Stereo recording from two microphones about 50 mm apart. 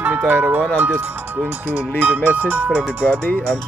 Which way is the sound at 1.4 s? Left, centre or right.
Right.